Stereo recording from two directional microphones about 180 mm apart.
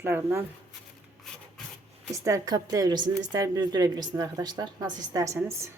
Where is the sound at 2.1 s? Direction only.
15° right (ahead or behind).